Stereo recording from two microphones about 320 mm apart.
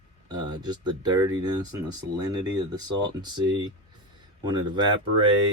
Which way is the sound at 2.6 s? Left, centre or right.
Centre.